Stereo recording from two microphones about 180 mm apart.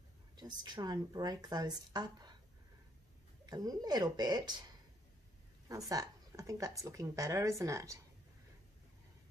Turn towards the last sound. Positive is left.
turn(degrees=-15)  # may be behind; listen again after turning